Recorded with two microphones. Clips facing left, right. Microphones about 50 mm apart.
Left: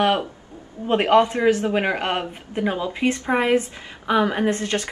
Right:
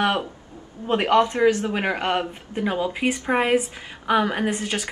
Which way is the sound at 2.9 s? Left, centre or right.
Centre.